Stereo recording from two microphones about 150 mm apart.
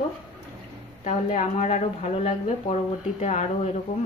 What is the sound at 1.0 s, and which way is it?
Speech, 50° left (ahead or behind).